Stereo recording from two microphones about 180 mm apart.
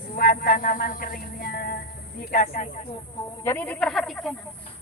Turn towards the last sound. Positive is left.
turn(degrees=0)  # may be behind; listen again after turning